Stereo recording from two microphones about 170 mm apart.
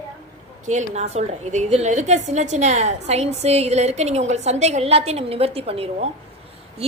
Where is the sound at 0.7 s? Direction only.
45° right (ahead or behind).